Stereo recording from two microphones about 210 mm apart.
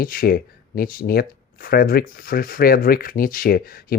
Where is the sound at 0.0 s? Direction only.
45° left (ahead or behind).